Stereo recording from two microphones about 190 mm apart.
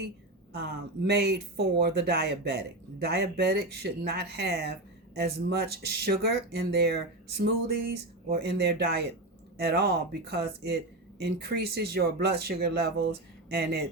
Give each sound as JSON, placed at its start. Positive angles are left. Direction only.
{"t": 0.6, "sound": "speech", "side_deg": -60}
{"t": 8.3, "sound": "speech", "side_deg": -55}